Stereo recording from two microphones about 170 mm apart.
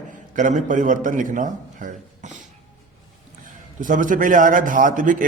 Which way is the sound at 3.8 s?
50° right (ahead or behind).